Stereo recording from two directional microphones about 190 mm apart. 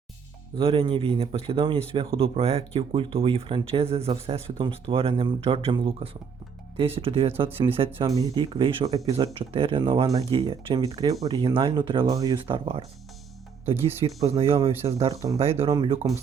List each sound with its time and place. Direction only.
0.5 s speech: 30° right (ahead or behind)
14.3 s speech: 30° right (ahead or behind)